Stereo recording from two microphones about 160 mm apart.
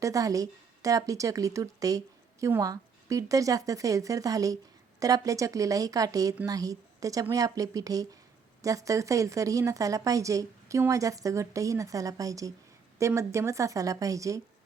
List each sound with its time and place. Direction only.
0.0 s a woman's voice: 20° right (ahead or behind)